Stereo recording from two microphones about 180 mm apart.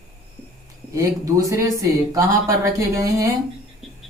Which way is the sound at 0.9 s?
20° right (ahead or behind).